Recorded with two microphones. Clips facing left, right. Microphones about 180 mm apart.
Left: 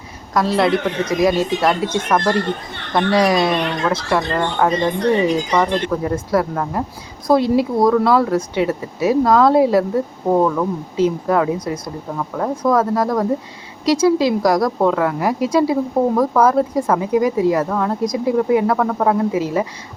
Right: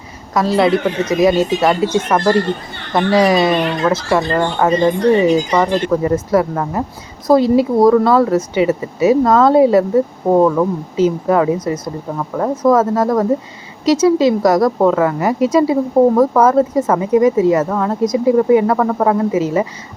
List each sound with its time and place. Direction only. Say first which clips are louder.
0.3 s a woman's voice: right 3 dB; centre (ahead or behind)